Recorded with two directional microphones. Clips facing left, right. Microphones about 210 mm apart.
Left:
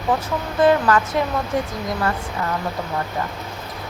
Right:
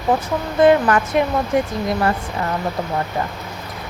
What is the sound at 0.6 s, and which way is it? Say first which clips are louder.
Speech: right 2 dB; 15° right (ahead or behind).